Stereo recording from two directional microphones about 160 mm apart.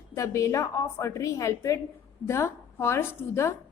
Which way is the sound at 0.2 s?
20° left (ahead or behind).